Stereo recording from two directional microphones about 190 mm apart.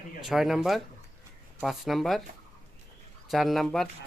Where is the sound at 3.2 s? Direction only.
Centre (ahead or behind).